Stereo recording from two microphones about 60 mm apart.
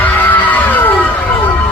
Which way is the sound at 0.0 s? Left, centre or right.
Left.